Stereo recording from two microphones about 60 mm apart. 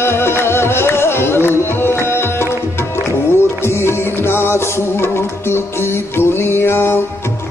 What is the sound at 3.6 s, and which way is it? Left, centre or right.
Music, left.